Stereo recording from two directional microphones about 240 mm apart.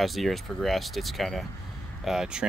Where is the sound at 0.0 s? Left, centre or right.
Centre.